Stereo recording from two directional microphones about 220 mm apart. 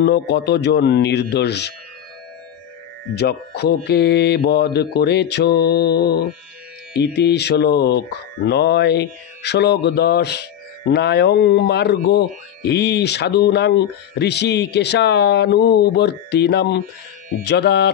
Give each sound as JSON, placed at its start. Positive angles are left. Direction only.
{"t": 0.0, "sound": "speech", "side_deg": 50}
{"t": 3.2, "sound": "speech", "side_deg": 50}